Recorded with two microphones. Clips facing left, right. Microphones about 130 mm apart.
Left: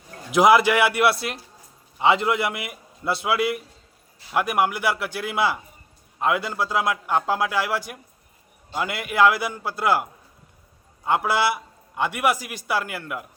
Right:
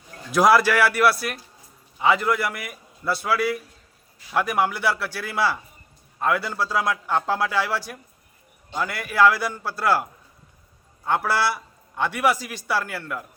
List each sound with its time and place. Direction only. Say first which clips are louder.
0.3 s a man's voice: left 1 dB; 15° left (ahead or behind)